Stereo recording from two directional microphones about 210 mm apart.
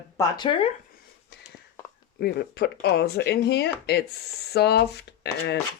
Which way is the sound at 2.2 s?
50° left (ahead or behind).